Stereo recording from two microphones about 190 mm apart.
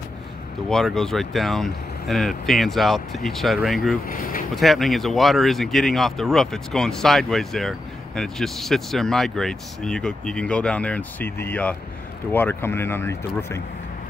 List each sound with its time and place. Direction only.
0.7 s speech: centre (ahead or behind)
4.1 s speech: 45° left (ahead or behind)
4.6 s speech: centre (ahead or behind)